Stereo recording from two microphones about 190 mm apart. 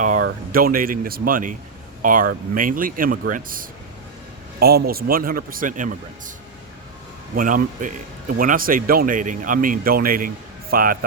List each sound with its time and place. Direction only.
0.5 s speech: 50° right (ahead or behind)
7.3 s speech: 45° right (ahead or behind)